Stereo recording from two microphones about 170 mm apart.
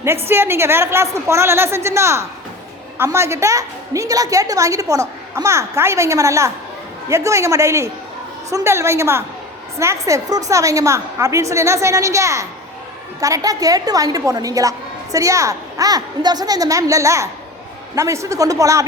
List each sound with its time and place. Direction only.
0.3 s a woman's voice: 15° right (ahead or behind)